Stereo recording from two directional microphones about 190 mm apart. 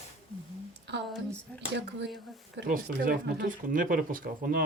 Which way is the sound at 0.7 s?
65° right (ahead or behind).